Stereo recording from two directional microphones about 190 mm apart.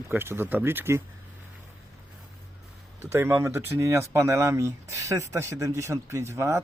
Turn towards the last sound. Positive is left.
turn(degrees=-15)  # may be behind; listen again after turning